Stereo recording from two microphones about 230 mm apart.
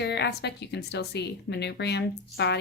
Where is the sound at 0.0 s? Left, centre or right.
Left.